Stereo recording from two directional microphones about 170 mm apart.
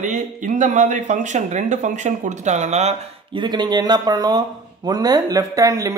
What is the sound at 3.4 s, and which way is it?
Speech, 25° right (ahead or behind).